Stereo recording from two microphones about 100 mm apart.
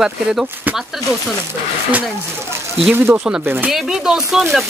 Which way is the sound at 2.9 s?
20° right (ahead or behind).